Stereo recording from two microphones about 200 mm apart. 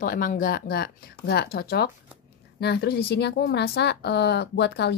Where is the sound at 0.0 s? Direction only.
45° left (ahead or behind).